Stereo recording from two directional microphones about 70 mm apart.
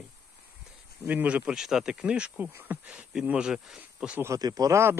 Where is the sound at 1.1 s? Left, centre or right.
Right.